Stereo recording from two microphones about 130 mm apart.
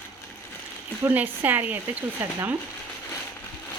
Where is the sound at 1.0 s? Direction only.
15° right (ahead or behind).